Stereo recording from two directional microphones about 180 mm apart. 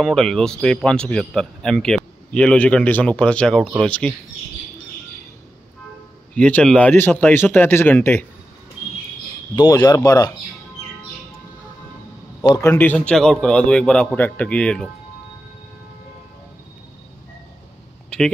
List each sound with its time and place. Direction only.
0.0 s speech: centre (ahead or behind)
6.3 s speech: 5° left (ahead or behind)
9.6 s speech: 20° left (ahead or behind)
12.4 s speech: 15° left (ahead or behind)